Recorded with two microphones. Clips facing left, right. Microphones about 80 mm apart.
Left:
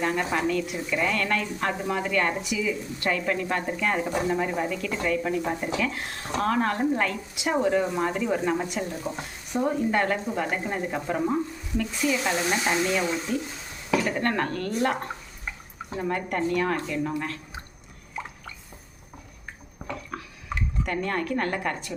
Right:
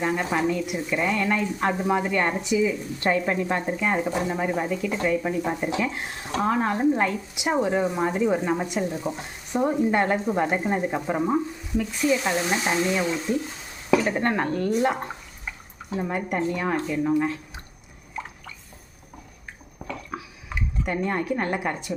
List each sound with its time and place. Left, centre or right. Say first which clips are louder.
0.0 s speech: right 2 dB; centre
13.3 s speech: right 3 dB; right
14.7 s speech: right 3 dB; centre
16.0 s speech: right 1 dB; centre
20.1 s a sound: even; centre